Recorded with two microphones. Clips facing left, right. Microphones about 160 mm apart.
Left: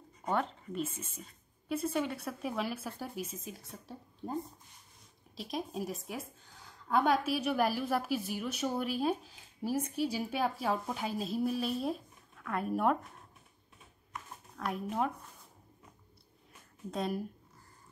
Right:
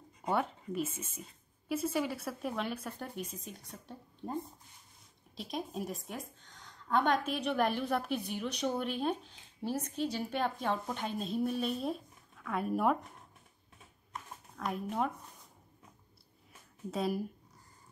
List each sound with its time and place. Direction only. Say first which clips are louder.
0.2 s a woman's voice: even; 10° right (ahead or behind)
14.6 s a woman's voice: left 1 dB; centre (ahead or behind)
16.9 s a woman's voice: right 1 dB; 5° right (ahead or behind)